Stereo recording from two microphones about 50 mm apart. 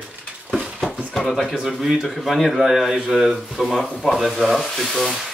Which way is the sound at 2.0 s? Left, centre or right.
Centre.